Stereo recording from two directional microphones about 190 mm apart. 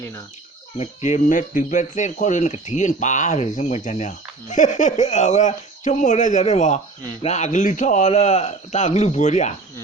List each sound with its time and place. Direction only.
0.8 s speech: 40° left (ahead or behind)